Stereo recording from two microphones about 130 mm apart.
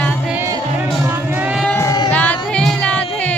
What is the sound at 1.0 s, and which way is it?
Music, 15° right (ahead or behind).